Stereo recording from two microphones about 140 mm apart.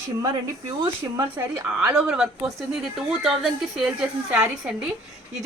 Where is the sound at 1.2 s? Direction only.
10° right (ahead or behind).